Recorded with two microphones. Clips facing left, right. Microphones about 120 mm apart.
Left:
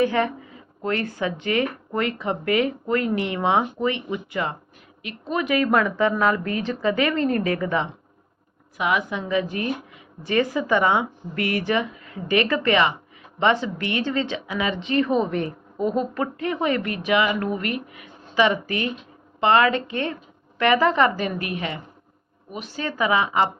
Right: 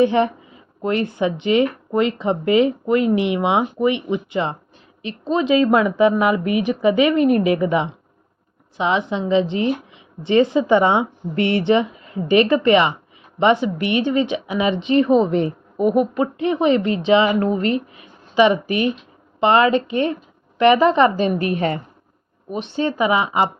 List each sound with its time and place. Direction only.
0.0 s a woman's voice: 20° right (ahead or behind); by 21.8 s 40° right (ahead or behind)
22.5 s speech: 25° right (ahead or behind)